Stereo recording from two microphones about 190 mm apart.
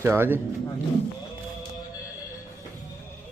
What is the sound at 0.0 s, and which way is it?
Speech, 10° right (ahead or behind).